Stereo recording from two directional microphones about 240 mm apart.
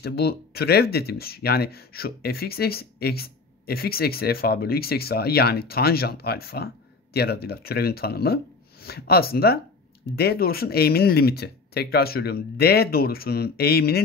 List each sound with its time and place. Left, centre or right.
0.0 s speech: left